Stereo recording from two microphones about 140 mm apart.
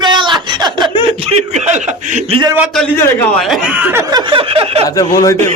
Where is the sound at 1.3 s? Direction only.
55° right (ahead or behind).